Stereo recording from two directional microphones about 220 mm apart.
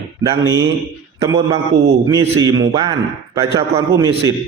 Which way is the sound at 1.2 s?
15° right (ahead or behind).